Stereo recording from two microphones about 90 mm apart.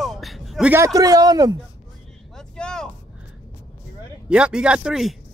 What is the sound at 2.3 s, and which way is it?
Vehicle, 10° left (ahead or behind).